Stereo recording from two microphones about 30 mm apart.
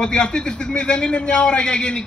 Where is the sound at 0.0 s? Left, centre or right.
Left.